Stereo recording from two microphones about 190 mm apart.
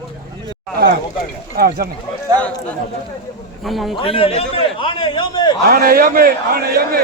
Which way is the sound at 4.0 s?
30° left (ahead or behind).